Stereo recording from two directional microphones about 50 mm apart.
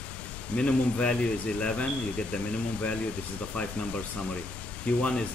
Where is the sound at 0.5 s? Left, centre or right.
Left.